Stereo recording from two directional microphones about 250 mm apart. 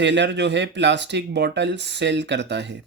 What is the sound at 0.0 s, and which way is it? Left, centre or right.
Speech, right.